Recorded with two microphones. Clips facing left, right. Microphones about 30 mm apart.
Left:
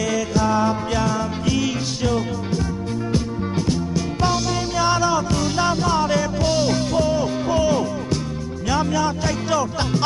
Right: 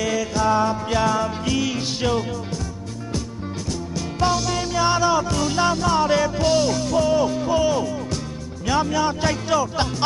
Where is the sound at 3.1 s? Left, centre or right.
Left.